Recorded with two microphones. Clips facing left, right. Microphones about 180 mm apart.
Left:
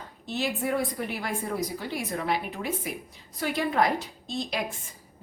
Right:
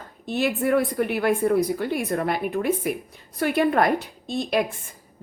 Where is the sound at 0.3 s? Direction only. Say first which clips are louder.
Right 6 dB; 60° right (ahead or behind).